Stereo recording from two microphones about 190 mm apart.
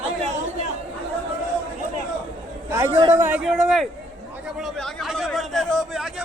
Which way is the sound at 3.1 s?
10° right (ahead or behind).